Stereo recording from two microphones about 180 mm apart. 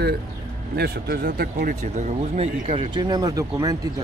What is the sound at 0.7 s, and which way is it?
Speech, 60° right (ahead or behind).